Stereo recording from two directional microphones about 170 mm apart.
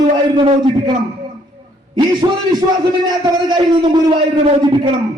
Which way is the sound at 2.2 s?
25° right (ahead or behind).